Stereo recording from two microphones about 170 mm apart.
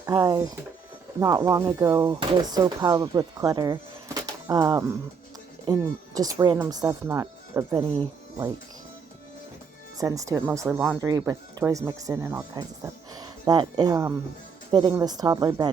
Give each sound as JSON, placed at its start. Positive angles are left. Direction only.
{"t": 0.0, "sound": "speech", "side_deg": -20}
{"t": 10.0, "sound": "speech", "side_deg": -20}